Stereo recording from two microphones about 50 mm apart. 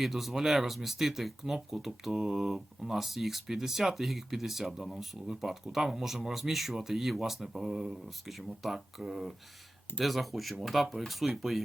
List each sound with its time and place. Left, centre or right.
0.0 s speech: centre